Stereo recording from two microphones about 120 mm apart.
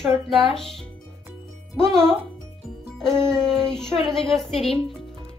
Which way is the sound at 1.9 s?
5° left (ahead or behind).